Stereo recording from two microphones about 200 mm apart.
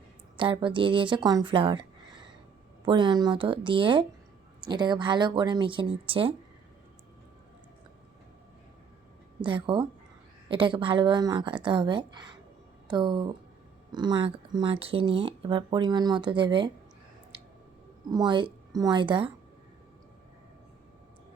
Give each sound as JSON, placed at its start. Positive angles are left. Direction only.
{"t": 0.3, "sound": "speech", "side_deg": -25}
{"t": 9.4, "sound": "speech", "side_deg": -25}
{"t": 18.1, "sound": "speech", "side_deg": -20}